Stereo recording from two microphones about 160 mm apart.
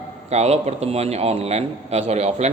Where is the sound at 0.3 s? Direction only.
40° right (ahead or behind).